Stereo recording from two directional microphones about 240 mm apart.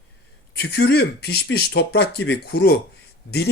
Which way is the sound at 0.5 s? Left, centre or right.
Left.